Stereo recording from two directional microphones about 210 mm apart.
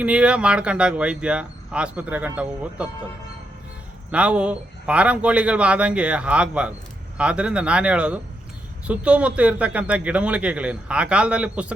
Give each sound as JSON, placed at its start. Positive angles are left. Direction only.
{"t": 0.0, "sound": "speech", "side_deg": -5}
{"t": 4.1, "sound": "speech", "side_deg": -5}